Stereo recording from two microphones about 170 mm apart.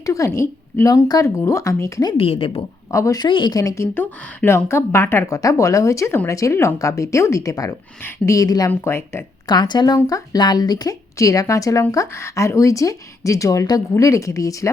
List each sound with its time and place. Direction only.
0.0 s speech: 20° left (ahead or behind)
2.1 s a woman's voice: 35° left (ahead or behind)
2.9 s a woman's voice: 20° left (ahead or behind)